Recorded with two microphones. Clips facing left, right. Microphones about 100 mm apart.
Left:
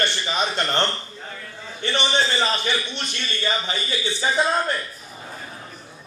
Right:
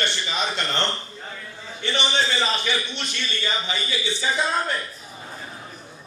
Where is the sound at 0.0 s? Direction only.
40° left (ahead or behind).